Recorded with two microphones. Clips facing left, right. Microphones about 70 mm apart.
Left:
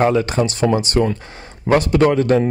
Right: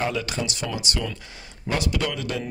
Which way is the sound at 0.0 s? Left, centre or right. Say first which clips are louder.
Left 11 dB; left.